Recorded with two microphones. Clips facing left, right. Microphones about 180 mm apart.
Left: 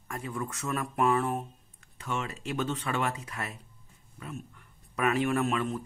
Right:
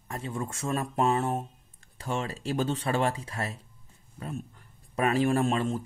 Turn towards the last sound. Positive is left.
turn(degrees=-30)  # may be behind; listen again after turning